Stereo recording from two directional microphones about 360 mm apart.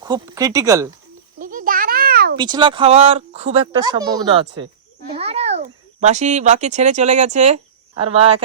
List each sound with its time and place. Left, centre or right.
0.0 s speech: centre
1.4 s a sound: right
2.4 s speech: centre